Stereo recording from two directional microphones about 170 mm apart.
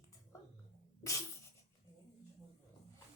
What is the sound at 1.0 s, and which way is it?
Music, 20° left (ahead or behind).